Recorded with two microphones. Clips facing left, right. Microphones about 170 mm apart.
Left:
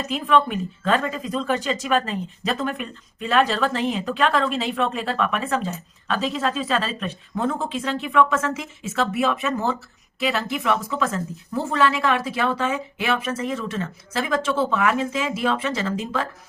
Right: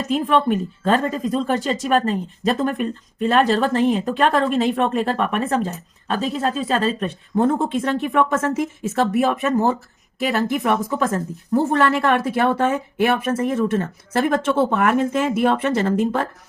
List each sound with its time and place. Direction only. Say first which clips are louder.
0.1 s speech: right 3 dB; 45° right (ahead or behind)